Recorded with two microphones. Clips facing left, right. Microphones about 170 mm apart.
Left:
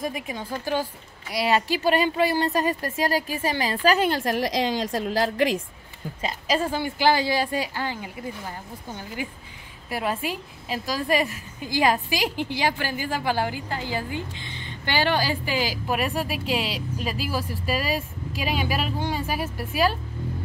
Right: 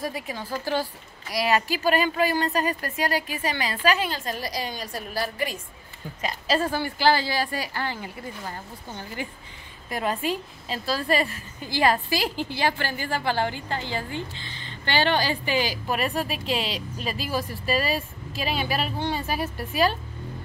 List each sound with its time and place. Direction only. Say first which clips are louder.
0.0 s speech: left 1 dB; 20° left (ahead or behind)
4.0 s a woman's voice: left 6 dB; 70° left (ahead or behind); by 5.6 s 90° left
6.2 s a woman's voice: even; 15° left (ahead or behind)